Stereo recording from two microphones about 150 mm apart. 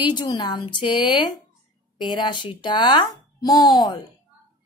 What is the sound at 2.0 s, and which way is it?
Speech, 30° left (ahead or behind).